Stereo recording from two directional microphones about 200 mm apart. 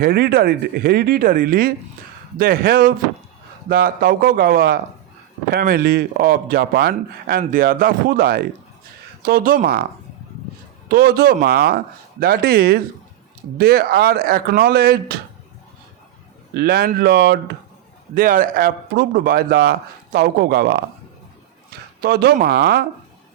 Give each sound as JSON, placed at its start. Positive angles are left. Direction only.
{"t": 0.0, "sound": "speech", "side_deg": -50}
{"t": 10.8, "sound": "speech", "side_deg": -50}
{"t": 16.6, "sound": "speech", "side_deg": -50}
{"t": 18.1, "sound": "speech", "side_deg": -45}
{"t": 22.0, "sound": "speech", "side_deg": -55}